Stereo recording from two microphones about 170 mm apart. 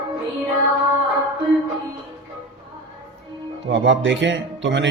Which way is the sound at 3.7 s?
90° right.